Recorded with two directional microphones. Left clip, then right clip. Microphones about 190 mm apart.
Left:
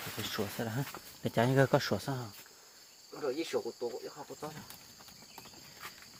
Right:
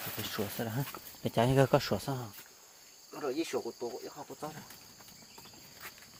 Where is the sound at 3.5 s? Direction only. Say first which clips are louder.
Left 1 dB; 35° right (ahead or behind).